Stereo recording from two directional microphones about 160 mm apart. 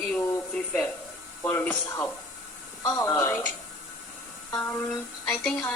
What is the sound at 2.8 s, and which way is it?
Speech, 20° left (ahead or behind).